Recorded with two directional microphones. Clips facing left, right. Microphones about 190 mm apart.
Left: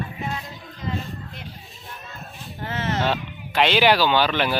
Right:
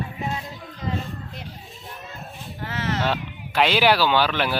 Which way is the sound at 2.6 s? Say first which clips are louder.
Left 1 dB; 25° left (ahead or behind).